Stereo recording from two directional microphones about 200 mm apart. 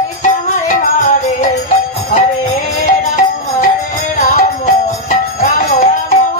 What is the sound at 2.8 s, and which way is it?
Music, 40° left (ahead or behind).